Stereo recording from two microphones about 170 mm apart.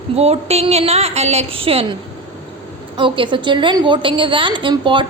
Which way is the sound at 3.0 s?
30° right (ahead or behind).